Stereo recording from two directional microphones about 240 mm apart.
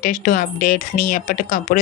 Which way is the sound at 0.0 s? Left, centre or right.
Left.